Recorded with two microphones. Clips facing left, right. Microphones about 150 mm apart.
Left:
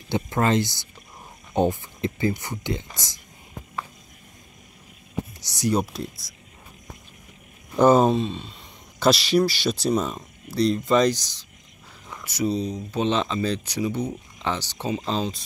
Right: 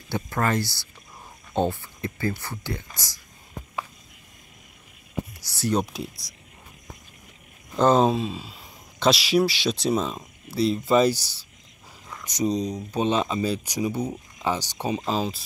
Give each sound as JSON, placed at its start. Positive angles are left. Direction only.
{"t": 0.1, "sound": "speech", "side_deg": 20}
{"t": 5.4, "sound": "speech", "side_deg": 15}
{"t": 5.9, "sound": "speech", "side_deg": 0}
{"t": 7.7, "sound": "speech", "side_deg": 10}